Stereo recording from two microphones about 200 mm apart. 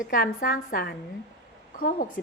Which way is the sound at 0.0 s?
45° left (ahead or behind).